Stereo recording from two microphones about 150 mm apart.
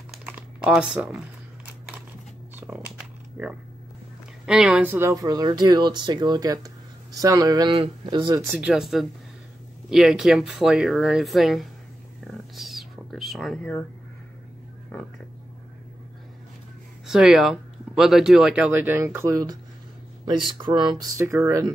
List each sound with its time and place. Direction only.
0.2 s typing: 10° right (ahead or behind)
2.5 s a sound: 15° right (ahead or behind)
4.5 s speech: 5° right (ahead or behind); by 8.4 s 30° right (ahead or behind)
8.5 s speech: 5° right (ahead or behind)
12.3 s a sound: centre (ahead or behind)
17.0 s speech: 5° right (ahead or behind); by 21.7 s 20° right (ahead or behind)